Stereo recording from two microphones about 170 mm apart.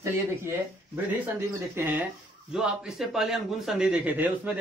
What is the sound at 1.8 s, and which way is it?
A man's voice, 10° right (ahead or behind).